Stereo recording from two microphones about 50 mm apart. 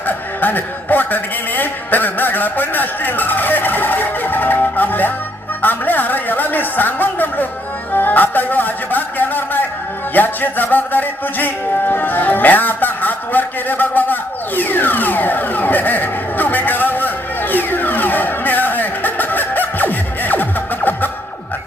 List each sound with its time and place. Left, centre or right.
0.1 s a man's voice: left
10.2 s music: left